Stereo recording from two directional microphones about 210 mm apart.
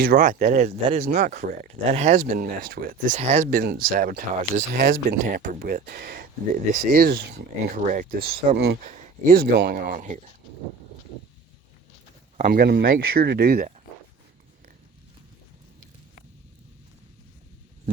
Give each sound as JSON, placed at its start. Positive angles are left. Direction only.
{"t": 0.0, "sound": "speech", "side_deg": -45}
{"t": 1.0, "sound": "speech", "side_deg": -50}
{"t": 3.2, "sound": "speech", "side_deg": -30}
{"t": 8.9, "sound": "speech", "side_deg": -40}
{"t": 12.4, "sound": "speech", "side_deg": -45}